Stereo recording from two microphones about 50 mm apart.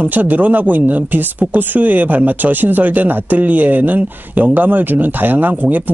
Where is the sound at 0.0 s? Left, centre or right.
Right.